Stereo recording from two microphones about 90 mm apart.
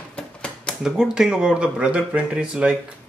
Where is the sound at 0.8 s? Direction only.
5° right (ahead or behind).